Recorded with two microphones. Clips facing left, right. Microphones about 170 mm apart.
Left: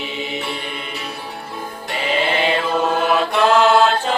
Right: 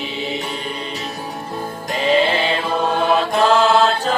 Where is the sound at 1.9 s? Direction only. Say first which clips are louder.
Right 4 dB; 35° right (ahead or behind).